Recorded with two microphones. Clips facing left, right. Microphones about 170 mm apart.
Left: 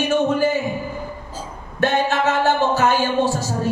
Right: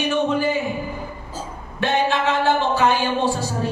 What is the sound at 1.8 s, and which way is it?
A man's voice, 45° left (ahead or behind).